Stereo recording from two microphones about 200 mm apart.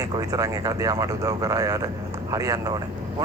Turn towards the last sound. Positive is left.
turn(degrees=-20)  # may be behind; listen again after turning